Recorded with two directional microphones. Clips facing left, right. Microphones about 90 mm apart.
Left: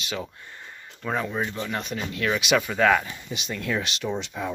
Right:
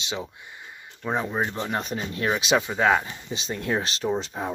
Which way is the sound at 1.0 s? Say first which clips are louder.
Right 1 dB; 25° right (ahead or behind).